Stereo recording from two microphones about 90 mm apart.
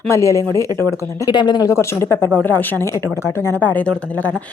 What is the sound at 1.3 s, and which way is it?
Speech, 55° left (ahead or behind).